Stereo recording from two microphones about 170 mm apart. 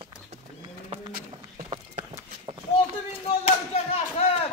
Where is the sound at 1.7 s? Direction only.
35° right (ahead or behind).